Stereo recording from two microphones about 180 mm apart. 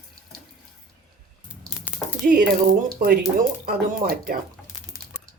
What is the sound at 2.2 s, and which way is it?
Speech, 50° right (ahead or behind).